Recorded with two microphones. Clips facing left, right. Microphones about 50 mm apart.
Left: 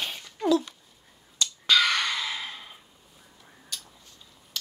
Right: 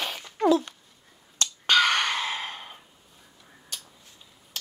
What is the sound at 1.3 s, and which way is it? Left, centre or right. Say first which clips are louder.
Finger snapping: right 1 dB; right.